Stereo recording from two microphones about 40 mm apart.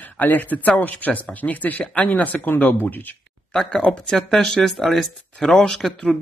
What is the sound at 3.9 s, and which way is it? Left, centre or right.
Speech, centre.